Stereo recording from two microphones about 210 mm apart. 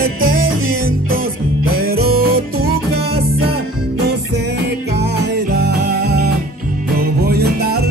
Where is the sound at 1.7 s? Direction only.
45° right (ahead or behind).